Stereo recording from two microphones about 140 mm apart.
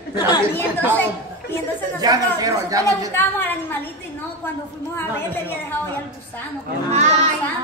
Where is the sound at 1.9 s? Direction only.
25° right (ahead or behind).